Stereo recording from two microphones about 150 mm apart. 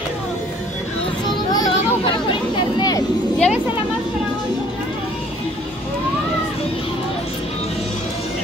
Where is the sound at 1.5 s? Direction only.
25° left (ahead or behind).